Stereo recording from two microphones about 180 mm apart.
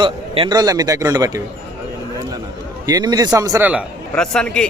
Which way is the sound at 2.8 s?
20° right (ahead or behind).